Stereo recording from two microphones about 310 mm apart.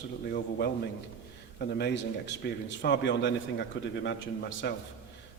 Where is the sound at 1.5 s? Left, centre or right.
Left.